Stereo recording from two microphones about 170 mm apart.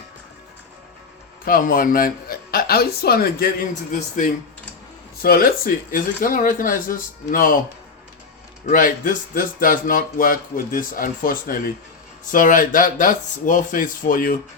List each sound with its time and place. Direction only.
1.5 s speech: 55° left (ahead or behind)
3.9 s speech: 45° left (ahead or behind)
5.2 s speech: 60° left (ahead or behind)
8.6 s speech: 50° left (ahead or behind)